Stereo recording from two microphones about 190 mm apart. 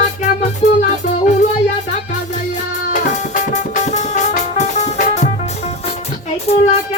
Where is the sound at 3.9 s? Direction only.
40° left (ahead or behind).